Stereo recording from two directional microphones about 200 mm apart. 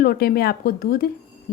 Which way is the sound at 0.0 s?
50° left (ahead or behind).